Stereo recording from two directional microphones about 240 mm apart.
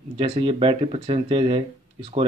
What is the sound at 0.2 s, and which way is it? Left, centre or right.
Speech, right.